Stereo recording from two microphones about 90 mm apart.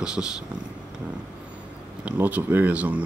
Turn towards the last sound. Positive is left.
turn(degrees=-15)  # may be behind; listen again after turning